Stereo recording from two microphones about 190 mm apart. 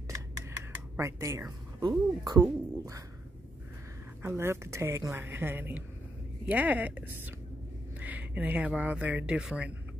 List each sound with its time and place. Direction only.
0.9 s a woman's voice: 15° right (ahead or behind)
4.2 s a woman's voice: 15° right (ahead or behind)